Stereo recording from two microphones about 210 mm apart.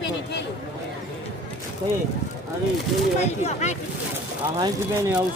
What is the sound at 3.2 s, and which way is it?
Speech, 35° left (ahead or behind).